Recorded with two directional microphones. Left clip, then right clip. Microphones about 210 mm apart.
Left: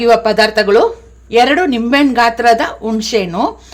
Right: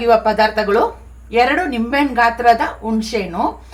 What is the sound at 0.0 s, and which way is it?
Speech, 60° left (ahead or behind).